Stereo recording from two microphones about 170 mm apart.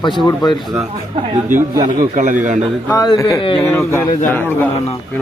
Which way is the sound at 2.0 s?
50° right (ahead or behind).